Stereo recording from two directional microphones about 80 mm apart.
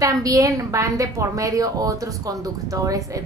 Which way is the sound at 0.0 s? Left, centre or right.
Right.